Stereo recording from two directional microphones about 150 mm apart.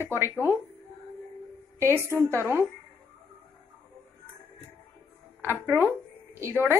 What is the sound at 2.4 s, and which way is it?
Speech, 15° right (ahead or behind).